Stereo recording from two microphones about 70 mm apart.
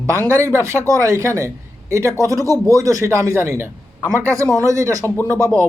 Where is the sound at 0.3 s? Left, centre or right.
Right.